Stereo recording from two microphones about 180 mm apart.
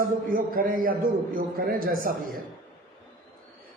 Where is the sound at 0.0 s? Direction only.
50° right (ahead or behind).